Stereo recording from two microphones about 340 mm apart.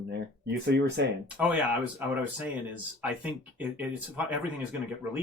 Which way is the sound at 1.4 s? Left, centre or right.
Centre.